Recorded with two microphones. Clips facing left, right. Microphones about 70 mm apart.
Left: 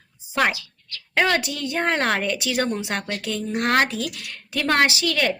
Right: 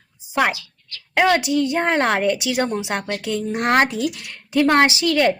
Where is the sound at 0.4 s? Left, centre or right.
Centre.